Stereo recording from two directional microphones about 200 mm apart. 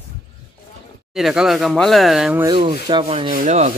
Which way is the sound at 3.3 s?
40° right (ahead or behind).